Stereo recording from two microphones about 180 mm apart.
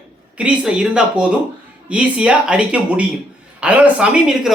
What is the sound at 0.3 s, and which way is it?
Speech, 5° right (ahead or behind).